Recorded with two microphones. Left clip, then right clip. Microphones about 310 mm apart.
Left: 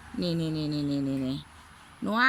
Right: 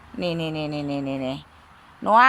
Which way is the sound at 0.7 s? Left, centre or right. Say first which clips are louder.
Right 3 dB; right.